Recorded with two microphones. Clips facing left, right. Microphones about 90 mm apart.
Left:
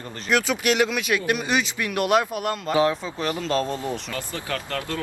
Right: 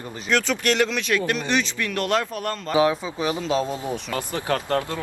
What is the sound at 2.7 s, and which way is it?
A man's voice, 5° right (ahead or behind).